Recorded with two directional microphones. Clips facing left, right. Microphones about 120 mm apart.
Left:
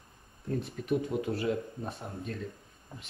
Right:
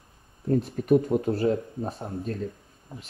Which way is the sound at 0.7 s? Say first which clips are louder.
Right 8 dB; 50° right (ahead or behind).